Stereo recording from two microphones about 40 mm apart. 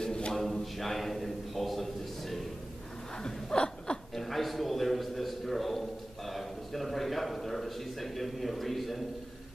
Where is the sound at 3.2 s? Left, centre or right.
Centre.